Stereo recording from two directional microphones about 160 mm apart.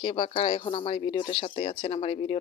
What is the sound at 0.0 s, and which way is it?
Speech, 35° left (ahead or behind).